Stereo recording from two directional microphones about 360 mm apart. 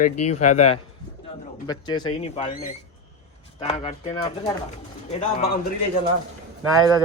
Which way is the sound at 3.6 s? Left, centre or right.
Centre.